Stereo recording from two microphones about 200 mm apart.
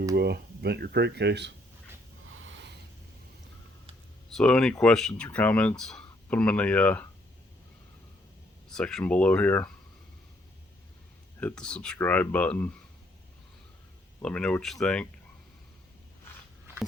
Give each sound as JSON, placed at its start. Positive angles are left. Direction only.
{"t": 0.2, "sound": "speech", "side_deg": -55}
{"t": 2.2, "sound": "a sound", "side_deg": -80}
{"t": 4.4, "sound": "speech", "side_deg": 5}
{"t": 8.7, "sound": "speech", "side_deg": 5}
{"t": 11.3, "sound": "speech", "side_deg": 5}
{"t": 14.2, "sound": "speech", "side_deg": 5}